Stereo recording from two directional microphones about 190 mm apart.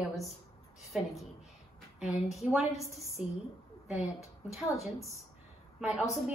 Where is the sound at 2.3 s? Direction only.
Centre (ahead or behind).